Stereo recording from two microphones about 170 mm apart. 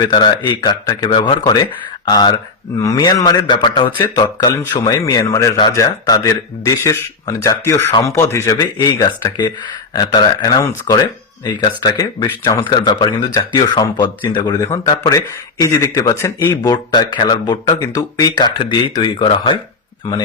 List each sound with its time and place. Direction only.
0.0 s speech: 25° left (ahead or behind)